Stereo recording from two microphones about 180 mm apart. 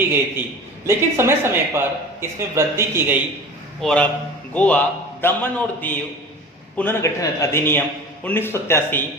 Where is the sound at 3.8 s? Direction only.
5° left (ahead or behind).